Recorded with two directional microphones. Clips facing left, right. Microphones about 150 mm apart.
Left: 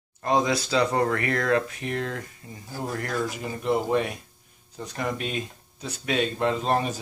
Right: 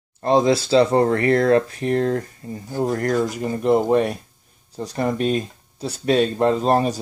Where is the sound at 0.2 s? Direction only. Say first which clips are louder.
Right 7 dB; 30° right (ahead or behind).